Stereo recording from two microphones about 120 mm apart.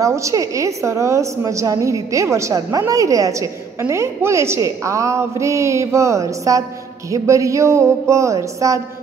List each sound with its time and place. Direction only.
0.0 s a woman's voice: 25° right (ahead or behind)